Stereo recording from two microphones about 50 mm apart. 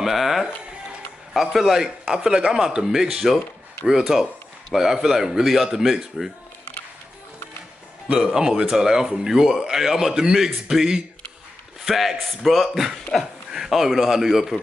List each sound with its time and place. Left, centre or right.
0.0 s music: centre
1.3 s speech: centre
8.2 s speech: centre